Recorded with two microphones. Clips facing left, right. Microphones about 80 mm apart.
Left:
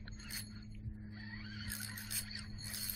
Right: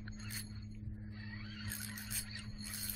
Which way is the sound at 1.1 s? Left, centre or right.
Centre.